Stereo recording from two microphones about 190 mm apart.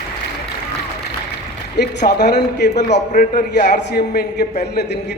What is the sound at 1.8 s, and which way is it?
A man's voice, 60° left (ahead or behind).